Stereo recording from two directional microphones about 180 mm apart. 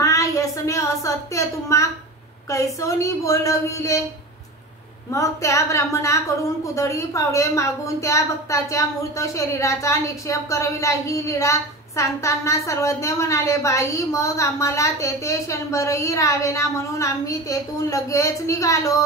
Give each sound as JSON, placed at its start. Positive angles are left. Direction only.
{"t": 0.0, "sound": "a woman's voice", "side_deg": 15}
{"t": 5.1, "sound": "a woman's voice", "side_deg": 15}